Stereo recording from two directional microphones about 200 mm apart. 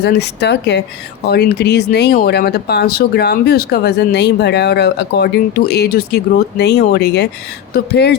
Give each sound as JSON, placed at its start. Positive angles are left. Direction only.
{"t": 0.0, "sound": "speech", "side_deg": 55}